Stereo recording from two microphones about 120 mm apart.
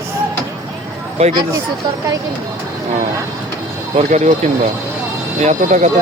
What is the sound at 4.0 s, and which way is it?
Speech, 70° right (ahead or behind).